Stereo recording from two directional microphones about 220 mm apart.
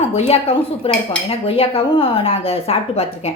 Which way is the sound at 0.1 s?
30° left (ahead or behind).